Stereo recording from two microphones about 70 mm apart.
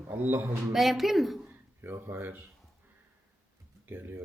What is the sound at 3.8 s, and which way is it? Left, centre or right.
Speech, right.